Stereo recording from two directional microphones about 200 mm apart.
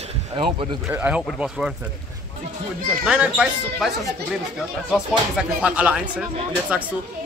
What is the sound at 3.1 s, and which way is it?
Speech, 5° right (ahead or behind).